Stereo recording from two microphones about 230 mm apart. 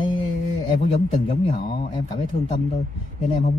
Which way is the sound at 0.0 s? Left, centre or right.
Left.